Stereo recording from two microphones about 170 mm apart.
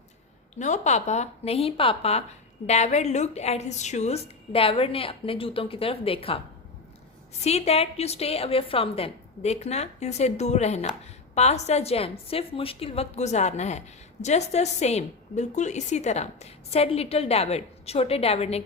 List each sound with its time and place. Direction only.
0.6 s a woman's voice: 45° left (ahead or behind)
7.4 s a woman's voice: 40° left (ahead or behind)